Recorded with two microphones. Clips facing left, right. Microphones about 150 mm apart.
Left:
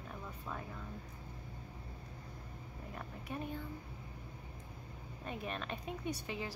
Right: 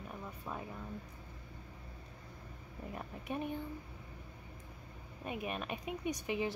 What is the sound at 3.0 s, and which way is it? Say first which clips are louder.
Speech: right 3 dB; 20° right (ahead or behind).